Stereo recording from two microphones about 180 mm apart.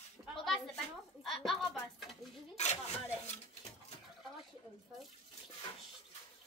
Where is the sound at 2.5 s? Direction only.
40° left (ahead or behind).